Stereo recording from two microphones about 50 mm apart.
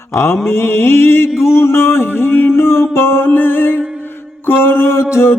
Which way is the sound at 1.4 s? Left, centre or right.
Left.